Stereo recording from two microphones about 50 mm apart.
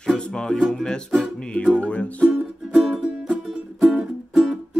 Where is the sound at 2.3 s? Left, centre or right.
Centre.